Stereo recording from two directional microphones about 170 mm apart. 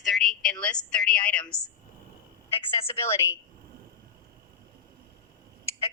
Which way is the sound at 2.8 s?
15° left (ahead or behind).